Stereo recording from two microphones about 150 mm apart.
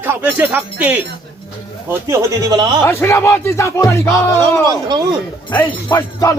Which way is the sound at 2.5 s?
30° right (ahead or behind).